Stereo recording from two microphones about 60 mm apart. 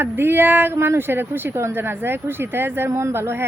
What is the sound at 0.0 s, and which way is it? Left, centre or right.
Speech, right.